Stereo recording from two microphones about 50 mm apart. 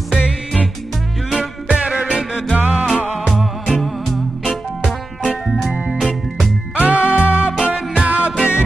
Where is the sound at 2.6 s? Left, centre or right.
Right.